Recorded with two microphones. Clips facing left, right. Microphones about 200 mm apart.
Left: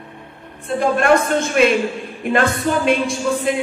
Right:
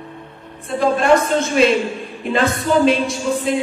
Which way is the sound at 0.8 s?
55° left (ahead or behind).